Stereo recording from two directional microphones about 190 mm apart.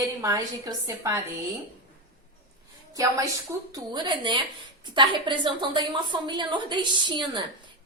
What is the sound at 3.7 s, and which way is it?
A woman's voice, 25° right (ahead or behind).